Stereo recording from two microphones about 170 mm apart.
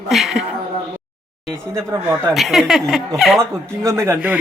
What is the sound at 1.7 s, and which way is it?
Speech, 15° right (ahead or behind).